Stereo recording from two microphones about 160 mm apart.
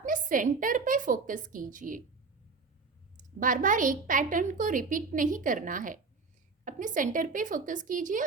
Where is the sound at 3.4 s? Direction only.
55° right (ahead or behind).